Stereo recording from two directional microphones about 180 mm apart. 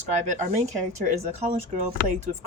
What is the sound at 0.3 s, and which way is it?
Speech, 45° right (ahead or behind).